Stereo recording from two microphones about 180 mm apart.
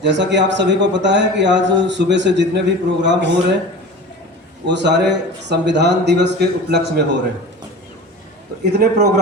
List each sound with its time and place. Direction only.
0.0 s a man's voice: 80° right
4.6 s a man's voice: 75° right (ahead or behind)
8.8 s speech: 55° right (ahead or behind)